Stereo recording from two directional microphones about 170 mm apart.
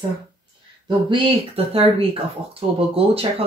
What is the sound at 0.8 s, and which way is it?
Speech, 30° right (ahead or behind).